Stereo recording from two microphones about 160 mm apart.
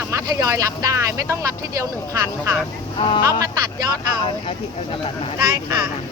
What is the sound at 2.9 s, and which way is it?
Speech, 30° left (ahead or behind).